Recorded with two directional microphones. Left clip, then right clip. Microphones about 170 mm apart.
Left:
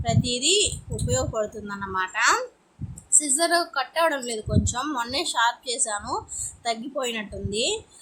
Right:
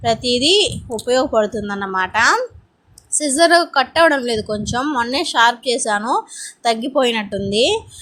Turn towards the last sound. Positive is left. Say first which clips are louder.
# right 10 dB
turn(degrees=-35)  # may be behind; listen again after turning